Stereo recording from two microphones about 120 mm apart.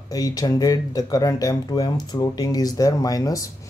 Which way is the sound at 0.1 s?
30° left (ahead or behind).